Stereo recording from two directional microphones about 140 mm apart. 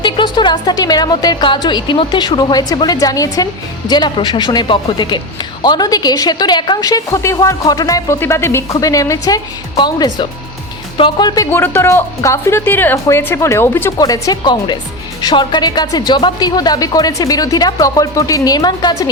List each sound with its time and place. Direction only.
0.0 s speech: 35° left (ahead or behind)
11.5 s speech: 15° left (ahead or behind)